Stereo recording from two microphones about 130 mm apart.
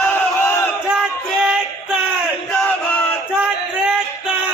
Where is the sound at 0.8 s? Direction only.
5° right (ahead or behind).